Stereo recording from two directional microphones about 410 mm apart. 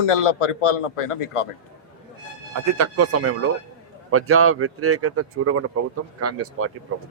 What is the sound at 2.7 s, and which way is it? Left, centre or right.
Speech, right.